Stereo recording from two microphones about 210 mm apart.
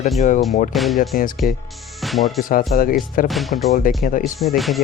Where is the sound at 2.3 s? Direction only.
40° left (ahead or behind).